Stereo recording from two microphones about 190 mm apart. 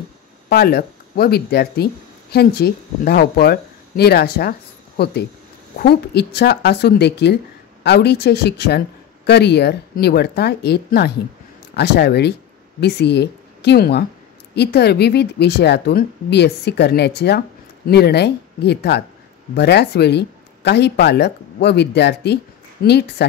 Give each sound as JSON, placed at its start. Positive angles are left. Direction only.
{"t": 0.5, "sound": "speech", "side_deg": 55}